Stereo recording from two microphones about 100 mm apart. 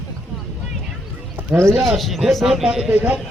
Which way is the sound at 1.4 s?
25° right (ahead or behind).